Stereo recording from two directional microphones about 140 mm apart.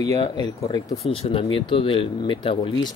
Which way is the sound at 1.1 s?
40° left (ahead or behind).